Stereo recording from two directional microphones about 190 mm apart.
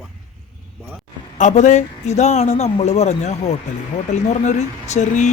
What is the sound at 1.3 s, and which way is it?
Speech, 40° left (ahead or behind).